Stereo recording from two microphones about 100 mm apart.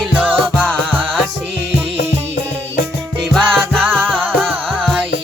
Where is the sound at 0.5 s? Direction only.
10° left (ahead or behind).